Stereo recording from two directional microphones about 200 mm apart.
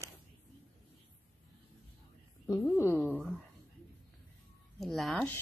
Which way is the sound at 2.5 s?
10° left (ahead or behind).